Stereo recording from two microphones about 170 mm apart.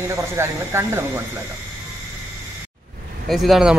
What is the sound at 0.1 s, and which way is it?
Speech, 15° right (ahead or behind).